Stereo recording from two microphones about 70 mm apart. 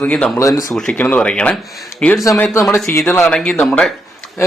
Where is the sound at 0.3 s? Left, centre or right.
Left.